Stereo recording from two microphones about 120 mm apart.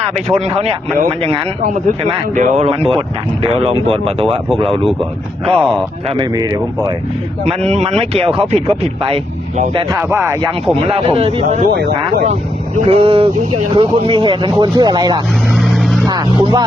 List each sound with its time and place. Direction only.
0.3 s speech: 60° right (ahead or behind)
2.3 s speech: 90° right; by 2.9 s 60° right (ahead or behind)
3.4 s speech: 50° right (ahead or behind)
5.5 s a man's voice: 5° left (ahead or behind)
6.1 s speech: 30° right (ahead or behind)
7.4 s speech: 65° right (ahead or behind)
10.0 s speech: 20° right (ahead or behind)
10.8 s speech: 50° right (ahead or behind)
11.4 s speech: 80° right
12.2 s speech: 65° right (ahead or behind); by 15.2 s 35° right (ahead or behind)
15.5 s vehicle: centre (ahead or behind)
16.0 s speech: 35° right (ahead or behind)